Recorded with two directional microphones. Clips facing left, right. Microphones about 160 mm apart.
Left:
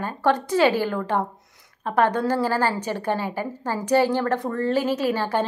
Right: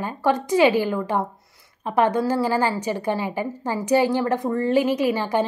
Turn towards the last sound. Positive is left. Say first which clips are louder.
# right 2 dB
turn(degrees=-15)  # may be behind; listen again after turning